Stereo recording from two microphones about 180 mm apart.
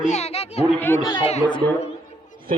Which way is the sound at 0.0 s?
40° left (ahead or behind).